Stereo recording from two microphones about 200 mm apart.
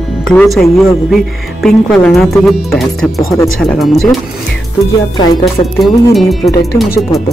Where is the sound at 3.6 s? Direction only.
Centre (ahead or behind).